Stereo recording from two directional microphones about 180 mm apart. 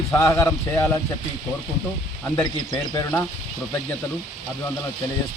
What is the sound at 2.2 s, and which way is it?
A man's voice, 15° left (ahead or behind).